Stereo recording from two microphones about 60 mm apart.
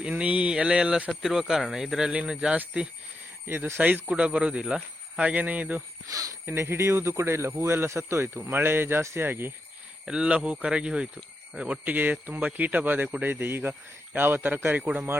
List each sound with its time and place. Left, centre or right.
0.0 s speech: right
1.1 s speech: centre
3.4 s speech: right
4.1 s speech: centre
6.1 s speech: right
6.4 s speech: right
8.4 s speech: right
10.1 s speech: centre
11.9 s speech: right